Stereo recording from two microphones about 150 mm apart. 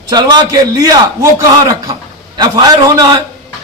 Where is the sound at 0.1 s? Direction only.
30° right (ahead or behind).